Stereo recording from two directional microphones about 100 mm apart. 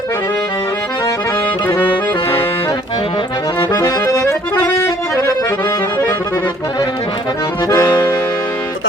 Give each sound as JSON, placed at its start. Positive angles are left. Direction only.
{"t": 3.9, "sound": "accordion", "side_deg": 40}
{"t": 7.7, "sound": "accordion", "side_deg": 35}